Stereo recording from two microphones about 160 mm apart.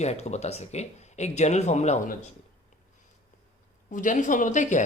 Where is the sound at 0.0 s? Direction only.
45° left (ahead or behind).